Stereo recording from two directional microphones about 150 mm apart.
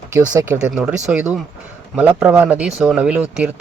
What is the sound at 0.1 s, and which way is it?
Speech, 20° right (ahead or behind).